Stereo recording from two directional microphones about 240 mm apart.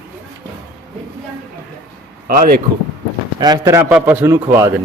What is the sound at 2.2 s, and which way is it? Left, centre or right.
Speech, right.